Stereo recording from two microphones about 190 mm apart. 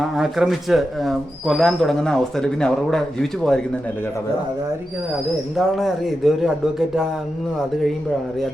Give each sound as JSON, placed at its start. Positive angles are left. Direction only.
{"t": 0.0, "sound": "speech", "side_deg": 0}
{"t": 5.5, "sound": "speech", "side_deg": 0}